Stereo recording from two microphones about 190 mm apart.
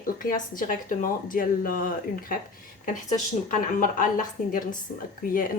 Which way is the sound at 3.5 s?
45° left (ahead or behind).